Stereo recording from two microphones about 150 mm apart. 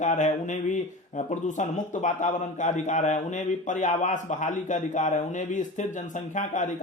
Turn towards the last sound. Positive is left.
turn(degrees=55)  # may be behind; listen again after turning